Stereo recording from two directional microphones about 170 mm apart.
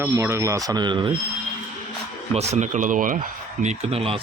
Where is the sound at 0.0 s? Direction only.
15° right (ahead or behind).